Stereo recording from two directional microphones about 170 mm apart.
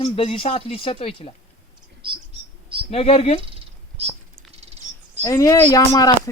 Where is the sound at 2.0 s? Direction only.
30° right (ahead or behind).